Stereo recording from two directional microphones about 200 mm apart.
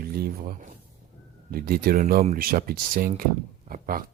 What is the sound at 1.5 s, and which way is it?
Speech, 50° right (ahead or behind).